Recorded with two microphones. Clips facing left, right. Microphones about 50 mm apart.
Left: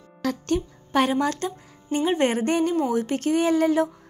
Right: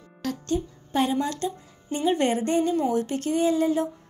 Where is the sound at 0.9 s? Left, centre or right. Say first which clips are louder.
Left 3 dB; left.